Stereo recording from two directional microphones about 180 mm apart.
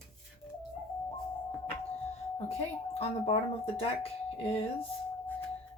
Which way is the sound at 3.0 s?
35° left (ahead or behind).